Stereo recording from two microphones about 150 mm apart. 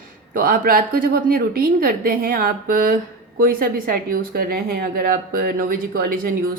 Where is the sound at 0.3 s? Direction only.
75° right (ahead or behind).